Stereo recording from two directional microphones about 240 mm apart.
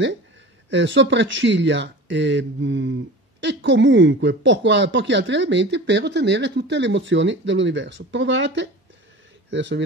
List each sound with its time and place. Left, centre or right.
0.7 s speech: right